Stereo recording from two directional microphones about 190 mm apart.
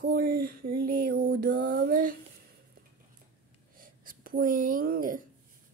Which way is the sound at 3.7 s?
45° right (ahead or behind).